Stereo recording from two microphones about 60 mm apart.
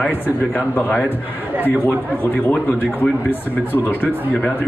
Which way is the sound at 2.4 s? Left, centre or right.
Left.